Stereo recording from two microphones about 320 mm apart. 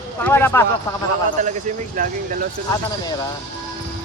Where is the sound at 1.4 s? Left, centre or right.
Right.